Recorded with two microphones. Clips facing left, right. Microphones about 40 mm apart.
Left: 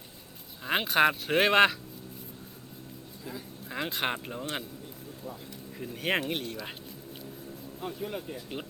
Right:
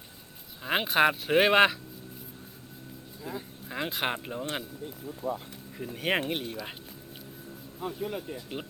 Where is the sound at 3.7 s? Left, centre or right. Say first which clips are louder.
Even; centre.